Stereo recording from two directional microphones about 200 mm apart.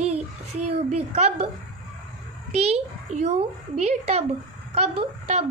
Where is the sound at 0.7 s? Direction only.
35° right (ahead or behind).